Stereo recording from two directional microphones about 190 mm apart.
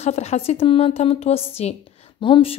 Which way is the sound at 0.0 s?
35° left (ahead or behind).